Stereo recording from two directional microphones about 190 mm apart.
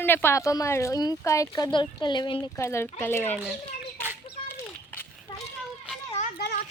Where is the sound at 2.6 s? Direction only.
15° left (ahead or behind).